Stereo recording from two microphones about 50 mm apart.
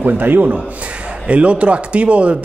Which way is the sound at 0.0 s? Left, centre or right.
Right.